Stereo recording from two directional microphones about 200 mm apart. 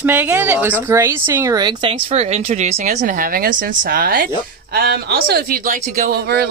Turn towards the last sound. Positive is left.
turn(degrees=-50)  # may be behind; listen again after turning